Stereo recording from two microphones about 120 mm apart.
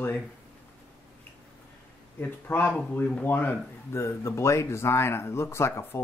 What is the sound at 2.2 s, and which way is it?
Speech, 15° left (ahead or behind).